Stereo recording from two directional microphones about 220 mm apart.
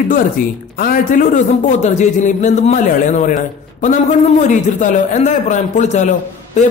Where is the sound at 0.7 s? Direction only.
40° left (ahead or behind).